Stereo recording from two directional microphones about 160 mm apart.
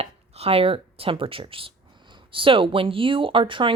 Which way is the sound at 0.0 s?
40° right (ahead or behind).